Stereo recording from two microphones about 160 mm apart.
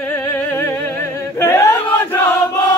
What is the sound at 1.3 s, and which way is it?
Chant, 15° left (ahead or behind).